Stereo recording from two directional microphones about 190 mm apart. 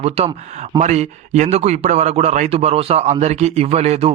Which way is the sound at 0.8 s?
40° right (ahead or behind).